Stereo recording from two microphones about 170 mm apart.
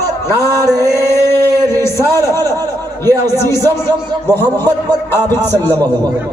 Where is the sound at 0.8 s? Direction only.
15° left (ahead or behind).